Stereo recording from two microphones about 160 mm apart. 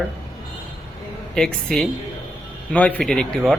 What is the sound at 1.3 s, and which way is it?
Speech, 5° left (ahead or behind).